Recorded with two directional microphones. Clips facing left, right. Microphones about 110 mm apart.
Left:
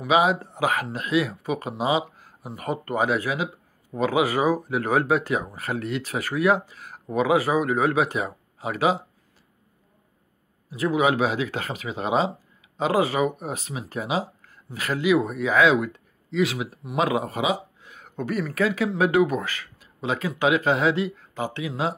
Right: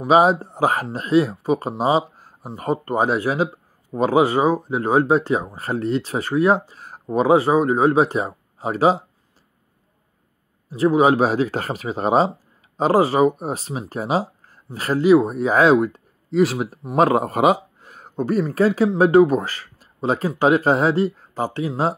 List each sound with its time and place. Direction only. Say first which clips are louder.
0.0 s speech: right 5 dB; 35° right (ahead or behind)
10.7 s speech: right 6 dB; 35° right (ahead or behind)